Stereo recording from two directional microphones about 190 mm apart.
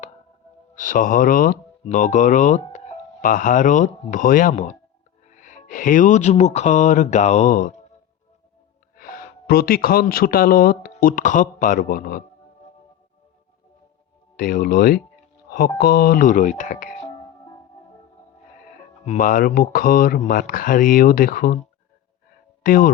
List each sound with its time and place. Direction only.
0.8 s speech: 45° left (ahead or behind)
9.0 s speech: 45° left (ahead or behind)
14.3 s speech: 50° left (ahead or behind)
15.4 s music: 50° left (ahead or behind)
15.8 s speech: 55° left (ahead or behind)
18.6 s speech: 40° left (ahead or behind)
22.6 s speech: 50° left (ahead or behind)